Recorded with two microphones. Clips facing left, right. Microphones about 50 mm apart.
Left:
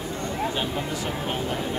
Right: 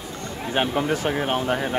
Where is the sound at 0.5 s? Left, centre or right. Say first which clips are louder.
Right 6 dB; right.